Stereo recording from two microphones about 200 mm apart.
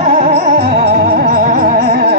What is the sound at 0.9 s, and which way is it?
Music, 45° right (ahead or behind).